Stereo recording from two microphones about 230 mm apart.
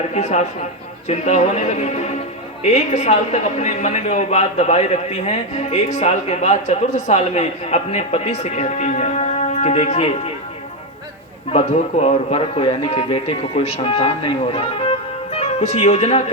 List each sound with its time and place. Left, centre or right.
0.1 s a woman's voice: left
11.5 s a woman's voice: left